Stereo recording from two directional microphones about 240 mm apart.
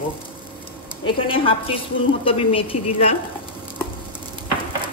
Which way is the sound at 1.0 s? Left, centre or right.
Left.